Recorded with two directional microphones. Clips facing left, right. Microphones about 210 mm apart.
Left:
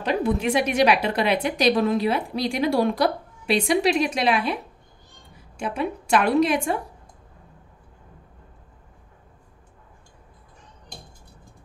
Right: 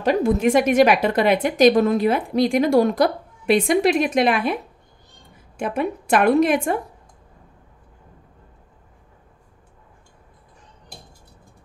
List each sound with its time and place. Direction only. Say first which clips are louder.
0.0 s a woman's voice: right 5 dB; 45° right (ahead or behind)
5.6 s a woman's voice: right 3 dB; 50° right (ahead or behind)